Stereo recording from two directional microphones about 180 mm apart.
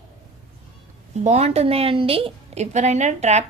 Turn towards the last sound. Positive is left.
turn(degrees=-40)  # may be behind; listen again after turning